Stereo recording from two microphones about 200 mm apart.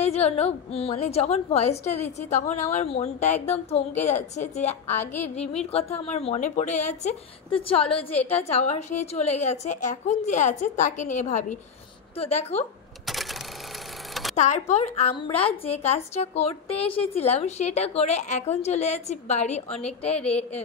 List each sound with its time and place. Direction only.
0.0 s a woman's voice: 30° left (ahead or behind)
4.9 s a sound: 10° left (ahead or behind)
5.3 s a woman's voice: 35° left (ahead or behind)
13.0 s cash register: centre (ahead or behind)
14.3 s a woman's voice: 35° left (ahead or behind)
20.2 s a woman's voice: 5° left (ahead or behind)